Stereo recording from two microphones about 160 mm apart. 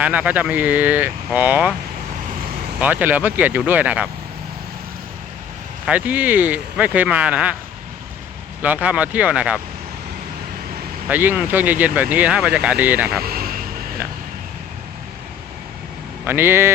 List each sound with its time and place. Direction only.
0.0 s speech: 10° right (ahead or behind)
2.8 s speech: 10° right (ahead or behind)
5.8 s speech: 10° right (ahead or behind)
8.6 s speech: 10° right (ahead or behind)
11.1 s speech: 10° right (ahead or behind)
13.2 s vehicle: 70° right (ahead or behind)
16.2 s speech: 15° right (ahead or behind)